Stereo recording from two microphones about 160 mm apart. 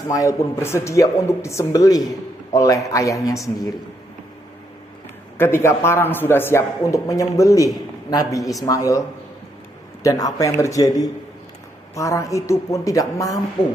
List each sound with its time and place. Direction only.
0.1 s speech: 20° left (ahead or behind)
5.4 s speech: 15° left (ahead or behind)